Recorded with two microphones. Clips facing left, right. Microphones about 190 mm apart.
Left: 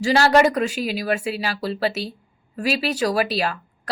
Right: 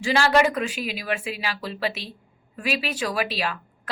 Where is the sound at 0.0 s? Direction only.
40° left (ahead or behind).